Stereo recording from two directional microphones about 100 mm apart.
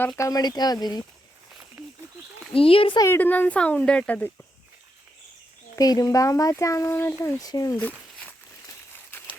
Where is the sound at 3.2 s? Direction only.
20° left (ahead or behind).